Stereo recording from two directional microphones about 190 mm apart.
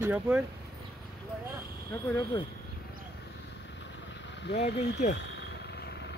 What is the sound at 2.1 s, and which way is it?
Speech, 20° left (ahead or behind).